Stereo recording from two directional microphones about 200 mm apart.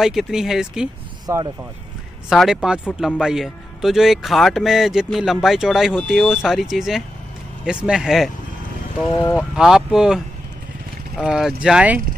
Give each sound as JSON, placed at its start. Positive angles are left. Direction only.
{"t": 0.0, "sound": "a man's voice", "side_deg": 0}
{"t": 1.2, "sound": "speech", "side_deg": -20}
{"t": 2.2, "sound": "a man's voice", "side_deg": 0}
{"t": 9.1, "sound": "speech", "side_deg": 10}
{"t": 9.4, "sound": "a man's voice", "side_deg": 0}